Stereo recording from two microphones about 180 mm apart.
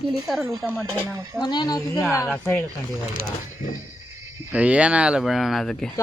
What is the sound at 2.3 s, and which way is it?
Speech, 10° left (ahead or behind).